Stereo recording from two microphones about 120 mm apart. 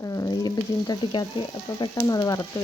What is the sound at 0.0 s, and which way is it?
Frying, 30° left (ahead or behind).